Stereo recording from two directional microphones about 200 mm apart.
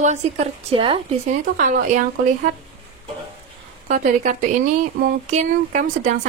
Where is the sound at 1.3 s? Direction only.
40° right (ahead or behind).